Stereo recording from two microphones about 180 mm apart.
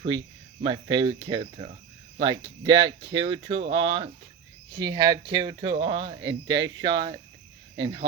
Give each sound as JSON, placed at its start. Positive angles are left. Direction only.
{"t": 0.1, "sound": "speech", "side_deg": -90}
{"t": 0.6, "sound": "speech", "side_deg": -25}